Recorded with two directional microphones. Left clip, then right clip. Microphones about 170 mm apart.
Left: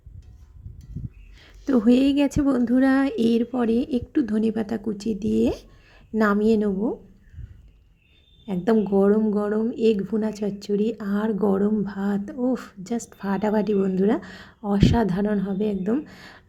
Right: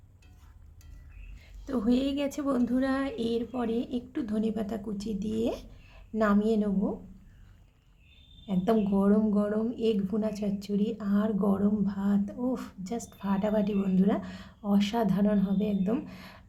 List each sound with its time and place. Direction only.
1.4 s speech: 30° left (ahead or behind)
8.4 s speech: 20° left (ahead or behind)